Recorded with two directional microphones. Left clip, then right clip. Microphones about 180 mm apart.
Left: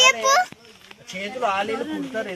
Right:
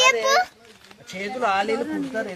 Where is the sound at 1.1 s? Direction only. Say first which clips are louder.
Right 1 dB; 20° right (ahead or behind).